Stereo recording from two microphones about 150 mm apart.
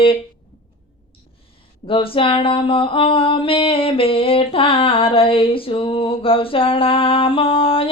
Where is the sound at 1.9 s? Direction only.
35° left (ahead or behind).